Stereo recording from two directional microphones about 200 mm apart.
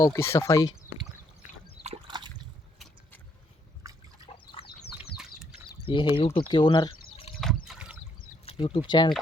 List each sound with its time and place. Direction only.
0.0 s speech: 15° left (ahead or behind)
1.8 s splash: 25° right (ahead or behind)
2.7 s vehicle: centre (ahead or behind)
3.9 s liquid: 15° right (ahead or behind)
5.8 s speech: 25° left (ahead or behind)
6.5 s a sound: 25° left (ahead or behind)
7.4 s a sound: 5° right (ahead or behind)
8.4 s speech: 25° left (ahead or behind)